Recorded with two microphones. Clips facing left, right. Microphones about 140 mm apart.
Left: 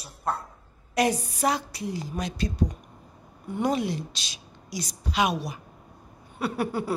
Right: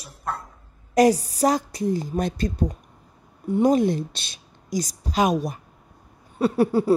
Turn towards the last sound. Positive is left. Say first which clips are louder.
# right 9 dB
turn(degrees=-35)  # may be behind; listen again after turning